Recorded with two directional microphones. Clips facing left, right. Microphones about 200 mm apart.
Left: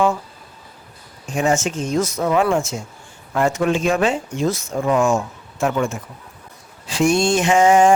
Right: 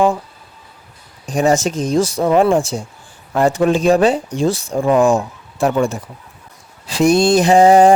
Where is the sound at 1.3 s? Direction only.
35° right (ahead or behind).